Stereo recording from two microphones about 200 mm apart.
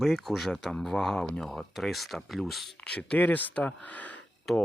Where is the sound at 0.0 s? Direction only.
Centre (ahead or behind).